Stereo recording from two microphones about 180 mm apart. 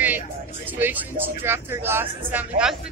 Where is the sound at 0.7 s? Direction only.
10° right (ahead or behind).